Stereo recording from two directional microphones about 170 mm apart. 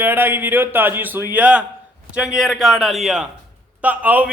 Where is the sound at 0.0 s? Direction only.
10° right (ahead or behind).